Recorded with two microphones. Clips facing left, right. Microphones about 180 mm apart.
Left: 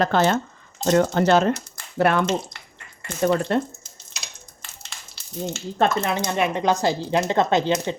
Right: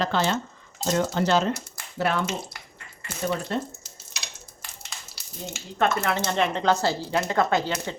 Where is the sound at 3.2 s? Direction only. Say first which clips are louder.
Left 7 dB; 65° left (ahead or behind).